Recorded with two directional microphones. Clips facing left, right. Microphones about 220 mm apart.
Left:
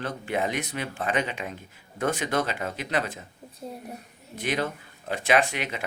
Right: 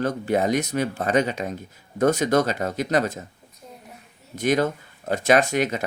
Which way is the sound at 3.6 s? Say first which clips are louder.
Left 7 dB; 30° left (ahead or behind).